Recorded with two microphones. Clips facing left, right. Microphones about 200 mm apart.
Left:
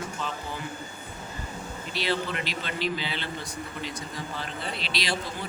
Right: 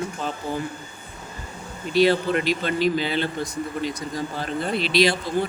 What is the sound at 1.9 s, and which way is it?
Speech, 45° right (ahead or behind).